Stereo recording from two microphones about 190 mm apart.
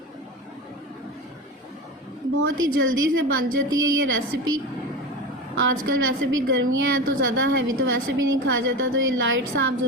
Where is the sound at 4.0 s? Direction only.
90° right.